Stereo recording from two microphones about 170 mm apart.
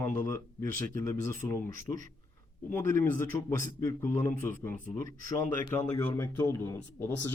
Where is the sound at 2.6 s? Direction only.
15° left (ahead or behind).